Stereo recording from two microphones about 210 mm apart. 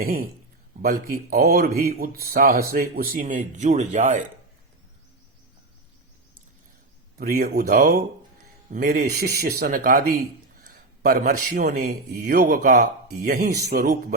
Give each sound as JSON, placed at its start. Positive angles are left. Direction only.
{"t": 0.0, "sound": "speech", "side_deg": -45}
{"t": 7.2, "sound": "speech", "side_deg": -45}